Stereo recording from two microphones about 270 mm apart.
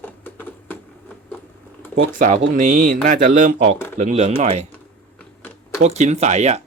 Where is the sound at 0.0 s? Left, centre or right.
Centre.